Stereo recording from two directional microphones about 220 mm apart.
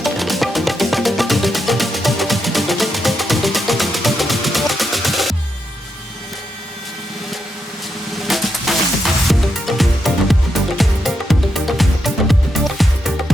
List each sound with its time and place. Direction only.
0.0 s music: centre (ahead or behind)
8.3 s music: centre (ahead or behind)